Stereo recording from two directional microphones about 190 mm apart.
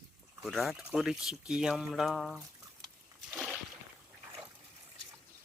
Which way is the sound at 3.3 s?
5° right (ahead or behind).